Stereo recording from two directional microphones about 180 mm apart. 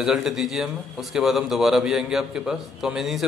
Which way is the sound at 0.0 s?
Centre (ahead or behind).